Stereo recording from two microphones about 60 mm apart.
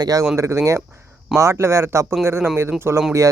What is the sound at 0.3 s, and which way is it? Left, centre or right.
Speech, right.